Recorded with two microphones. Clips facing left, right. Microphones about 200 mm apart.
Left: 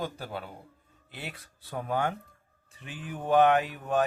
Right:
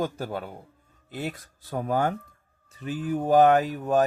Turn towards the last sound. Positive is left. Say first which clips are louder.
# right 5 dB
turn(degrees=-40)  # may be behind; listen again after turning